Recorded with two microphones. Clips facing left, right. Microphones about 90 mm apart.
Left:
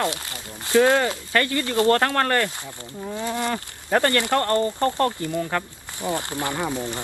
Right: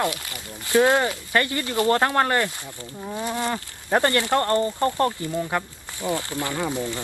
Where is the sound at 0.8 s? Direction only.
20° right (ahead or behind).